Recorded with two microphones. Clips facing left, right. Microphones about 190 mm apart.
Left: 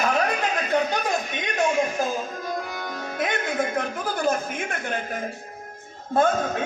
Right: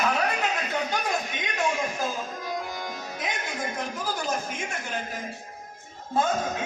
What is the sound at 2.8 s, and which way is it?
Speech, 60° left (ahead or behind).